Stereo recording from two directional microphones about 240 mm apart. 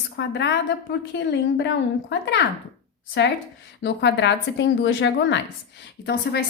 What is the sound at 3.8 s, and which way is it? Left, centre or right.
A woman's voice, left.